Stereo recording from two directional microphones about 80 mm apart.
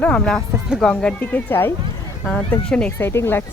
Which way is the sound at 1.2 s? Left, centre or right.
Left.